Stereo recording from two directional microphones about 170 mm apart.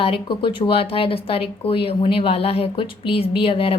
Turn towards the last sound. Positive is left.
turn(degrees=35)  # may be behind; listen again after turning